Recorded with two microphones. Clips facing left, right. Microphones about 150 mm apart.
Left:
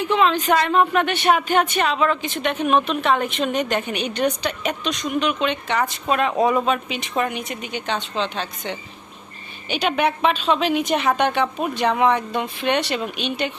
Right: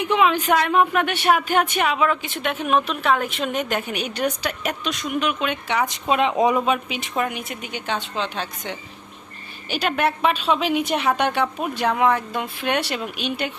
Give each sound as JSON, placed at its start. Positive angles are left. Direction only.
{"t": 0.0, "sound": "a woman's voice", "side_deg": -10}